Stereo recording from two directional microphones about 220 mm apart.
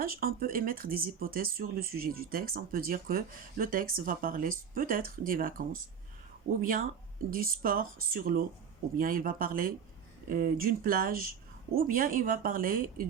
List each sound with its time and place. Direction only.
0.0 s speech: 40° right (ahead or behind)